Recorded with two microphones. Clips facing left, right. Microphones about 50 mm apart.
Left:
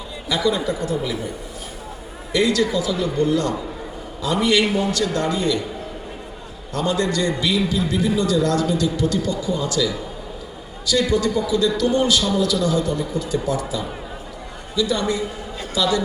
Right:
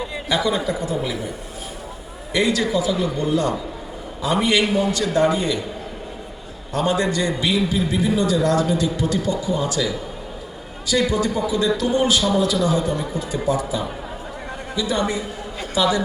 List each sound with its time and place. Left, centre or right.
0.3 s a man's voice: right
2.3 s a man's voice: centre
6.7 s a man's voice: centre
11.1 s a man's voice: centre